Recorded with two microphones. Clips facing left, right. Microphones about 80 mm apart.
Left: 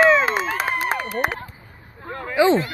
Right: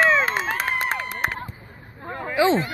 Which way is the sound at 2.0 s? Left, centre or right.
Centre.